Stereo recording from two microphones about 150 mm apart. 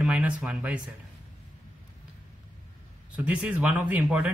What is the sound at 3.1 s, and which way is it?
A man's voice, 10° right (ahead or behind).